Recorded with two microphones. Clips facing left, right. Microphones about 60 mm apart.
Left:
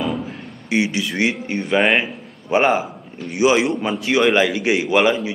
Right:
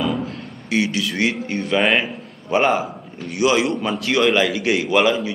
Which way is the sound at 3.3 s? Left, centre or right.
Centre.